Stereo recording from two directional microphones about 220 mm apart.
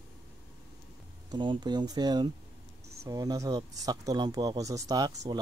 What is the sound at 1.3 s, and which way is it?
Speech, 20° right (ahead or behind).